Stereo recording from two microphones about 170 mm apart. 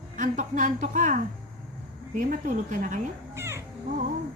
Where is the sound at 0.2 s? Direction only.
50° right (ahead or behind).